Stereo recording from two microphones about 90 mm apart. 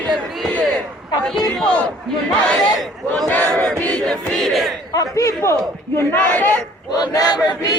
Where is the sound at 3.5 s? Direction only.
5° left (ahead or behind).